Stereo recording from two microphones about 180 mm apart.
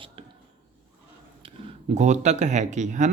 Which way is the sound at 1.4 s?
35° right (ahead or behind).